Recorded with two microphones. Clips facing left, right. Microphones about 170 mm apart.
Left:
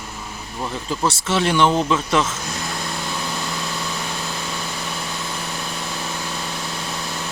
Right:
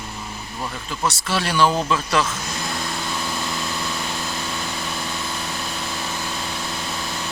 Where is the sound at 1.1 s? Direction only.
25° left (ahead or behind).